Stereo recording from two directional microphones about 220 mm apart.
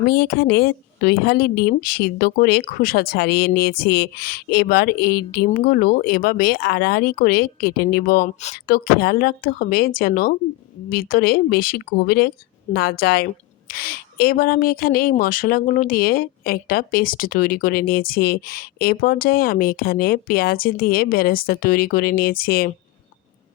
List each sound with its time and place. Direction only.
0.0 s a woman's voice: 45° left (ahead or behind)